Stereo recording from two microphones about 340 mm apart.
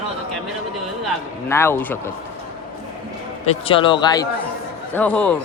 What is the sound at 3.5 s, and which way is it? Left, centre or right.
Speech, centre.